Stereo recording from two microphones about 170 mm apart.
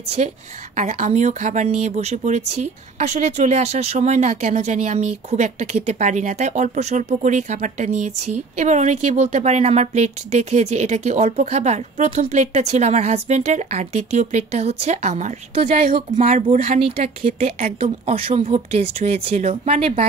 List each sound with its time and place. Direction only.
0.2 s speech: 45° right (ahead or behind)
15.9 s speech: 50° right (ahead or behind)